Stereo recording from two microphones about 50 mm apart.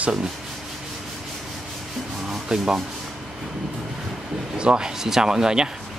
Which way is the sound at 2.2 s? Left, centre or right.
Centre.